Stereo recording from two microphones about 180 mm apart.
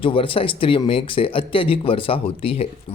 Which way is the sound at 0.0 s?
30° left (ahead or behind).